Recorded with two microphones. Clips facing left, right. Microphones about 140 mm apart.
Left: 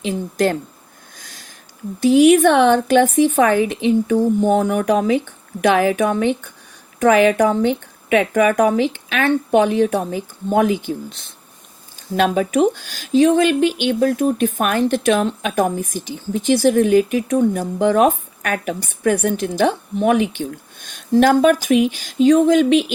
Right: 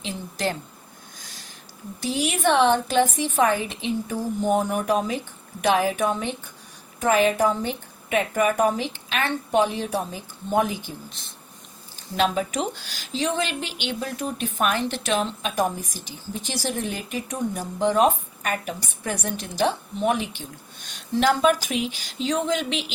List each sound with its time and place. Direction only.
0.0 s speech: 50° left (ahead or behind)
1.2 s a sound: 50° left (ahead or behind)
2.0 s a woman's voice: 55° left (ahead or behind)